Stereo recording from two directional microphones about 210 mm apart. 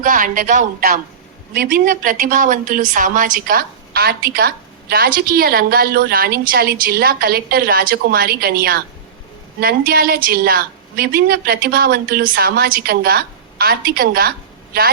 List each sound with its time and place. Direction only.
0.0 s a woman's voice: 40° right (ahead or behind)
1.9 s a woman's voice: 40° right (ahead or behind)